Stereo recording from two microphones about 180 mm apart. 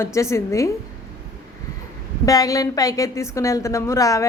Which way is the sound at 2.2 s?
20° left (ahead or behind).